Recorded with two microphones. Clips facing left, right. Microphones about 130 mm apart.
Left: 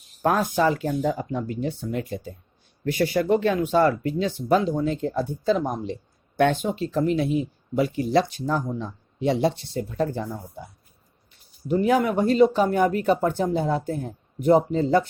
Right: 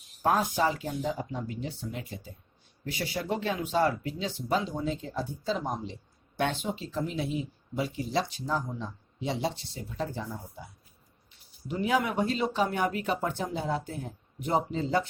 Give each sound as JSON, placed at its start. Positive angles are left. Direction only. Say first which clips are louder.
{"t": 0.2, "sound": "speech", "louder": "left 5 dB", "side_deg": 55}
{"t": 11.7, "sound": "speech", "louder": "left 7 dB", "side_deg": 50}